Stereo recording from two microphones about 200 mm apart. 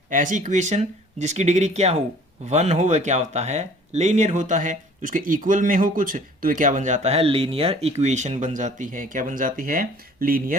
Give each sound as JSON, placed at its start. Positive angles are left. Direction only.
{"t": 0.1, "sound": "speech", "side_deg": -40}